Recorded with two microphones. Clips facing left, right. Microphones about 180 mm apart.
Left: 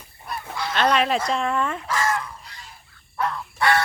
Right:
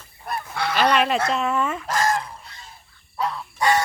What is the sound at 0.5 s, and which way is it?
Goose, 65° right (ahead or behind).